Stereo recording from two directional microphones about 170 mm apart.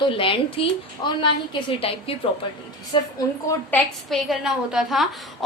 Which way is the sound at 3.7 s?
5° left (ahead or behind).